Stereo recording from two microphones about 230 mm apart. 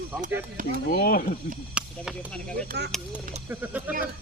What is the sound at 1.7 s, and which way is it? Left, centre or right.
Speech, centre.